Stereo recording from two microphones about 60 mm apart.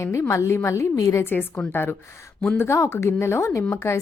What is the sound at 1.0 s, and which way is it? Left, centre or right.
Speech, left.